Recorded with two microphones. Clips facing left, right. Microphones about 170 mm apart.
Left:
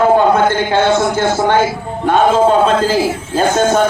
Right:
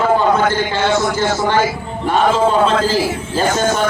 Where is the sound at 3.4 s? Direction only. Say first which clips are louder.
Left 4 dB; 55° left (ahead or behind).